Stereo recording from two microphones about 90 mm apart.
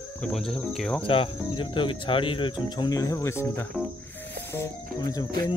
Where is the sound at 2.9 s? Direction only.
40° left (ahead or behind).